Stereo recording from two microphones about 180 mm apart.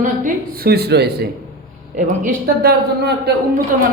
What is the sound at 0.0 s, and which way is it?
A woman's voice, 45° right (ahead or behind).